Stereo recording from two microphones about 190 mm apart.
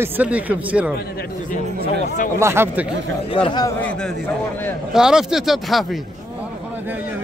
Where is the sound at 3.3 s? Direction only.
25° left (ahead or behind).